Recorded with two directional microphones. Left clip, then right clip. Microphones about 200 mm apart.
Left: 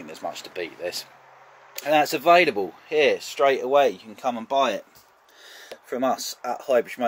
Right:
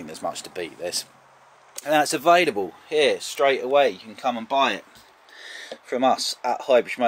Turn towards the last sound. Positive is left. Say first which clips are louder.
# right 3 dB
turn(degrees=0)  # may be behind; listen again after turning